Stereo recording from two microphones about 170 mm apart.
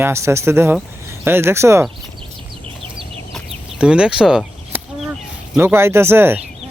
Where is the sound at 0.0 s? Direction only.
15° right (ahead or behind).